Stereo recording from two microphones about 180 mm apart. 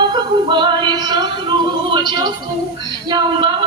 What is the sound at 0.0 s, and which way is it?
Music, 25° right (ahead or behind).